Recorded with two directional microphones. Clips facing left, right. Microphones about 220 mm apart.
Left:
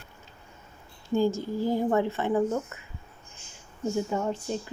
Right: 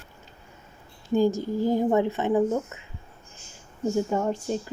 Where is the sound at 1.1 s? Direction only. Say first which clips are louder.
Right 3 dB; 15° right (ahead or behind).